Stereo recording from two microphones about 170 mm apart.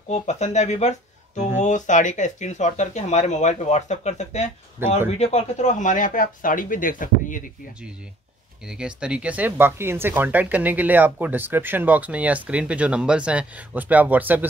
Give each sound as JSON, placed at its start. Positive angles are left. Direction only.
{"t": 0.1, "sound": "speech", "side_deg": 40}
{"t": 8.6, "sound": "speech", "side_deg": -5}